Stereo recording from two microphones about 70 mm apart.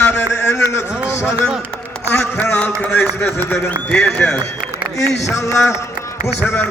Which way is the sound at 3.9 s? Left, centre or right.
Centre.